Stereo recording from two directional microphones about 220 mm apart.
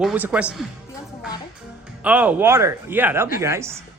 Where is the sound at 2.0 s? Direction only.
5° right (ahead or behind).